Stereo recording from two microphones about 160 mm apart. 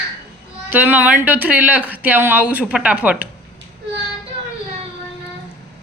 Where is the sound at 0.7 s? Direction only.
10° right (ahead or behind).